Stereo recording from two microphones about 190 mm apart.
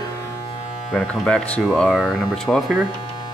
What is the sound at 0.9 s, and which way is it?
Speech, centre (ahead or behind).